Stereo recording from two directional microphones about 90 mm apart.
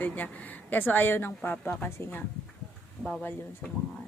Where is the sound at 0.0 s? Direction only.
15° left (ahead or behind).